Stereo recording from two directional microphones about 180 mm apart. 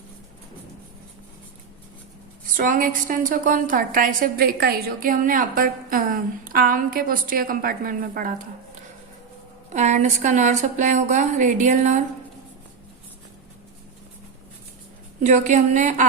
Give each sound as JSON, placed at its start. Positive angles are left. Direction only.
{"t": 2.6, "sound": "a woman's voice", "side_deg": -50}
{"t": 9.7, "sound": "a woman's voice", "side_deg": -40}
{"t": 15.2, "sound": "a woman's voice", "side_deg": -40}